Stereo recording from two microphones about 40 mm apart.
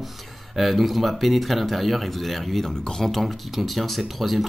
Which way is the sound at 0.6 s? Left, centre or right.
Centre.